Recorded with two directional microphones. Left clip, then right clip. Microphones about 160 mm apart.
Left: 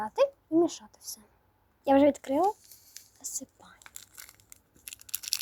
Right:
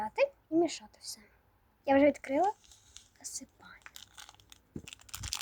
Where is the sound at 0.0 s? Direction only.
10° left (ahead or behind).